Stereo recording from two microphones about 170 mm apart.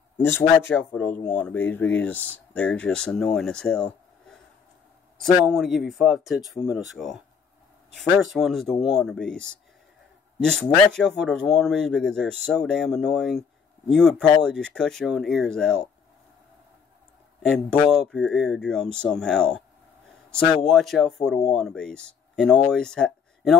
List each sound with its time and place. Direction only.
0.2 s speech: 15° left (ahead or behind)
5.2 s speech: centre (ahead or behind)
17.4 s speech: centre (ahead or behind)
20.6 s speech: centre (ahead or behind)